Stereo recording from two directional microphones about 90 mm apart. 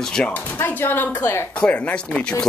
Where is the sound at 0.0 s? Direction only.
5° left (ahead or behind).